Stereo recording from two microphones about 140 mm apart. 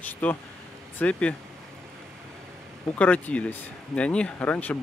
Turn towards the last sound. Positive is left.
turn(degrees=10)  # may be behind; listen again after turning